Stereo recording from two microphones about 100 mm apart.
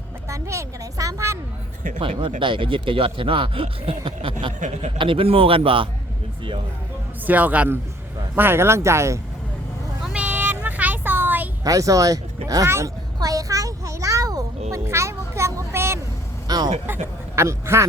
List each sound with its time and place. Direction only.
0.3 s speech: 30° right (ahead or behind)
2.0 s speech: 60° right (ahead or behind)
7.3 s speech: 15° right (ahead or behind)
10.0 s a sound: 10° right (ahead or behind)
11.6 s speech: 35° right (ahead or behind)
13.1 s a sound: 35° right (ahead or behind)
16.5 s vehicle: 40° right (ahead or behind)
16.8 s speech: 25° right (ahead or behind)